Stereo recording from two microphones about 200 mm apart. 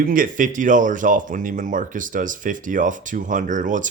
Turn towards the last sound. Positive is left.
turn(degrees=-40)  # may be behind; listen again after turning